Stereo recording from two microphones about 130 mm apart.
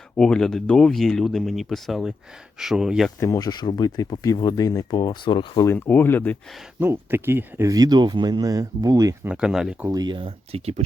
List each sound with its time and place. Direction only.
0.2 s speech: 5° left (ahead or behind)
3.2 s speech: 25° left (ahead or behind)
5.6 s speech: 15° left (ahead or behind)
6.7 s speech: 15° right (ahead or behind)
9.2 s speech: 5° right (ahead or behind)
9.9 s speech: 35° right (ahead or behind); by 10.8 s 50° right (ahead or behind)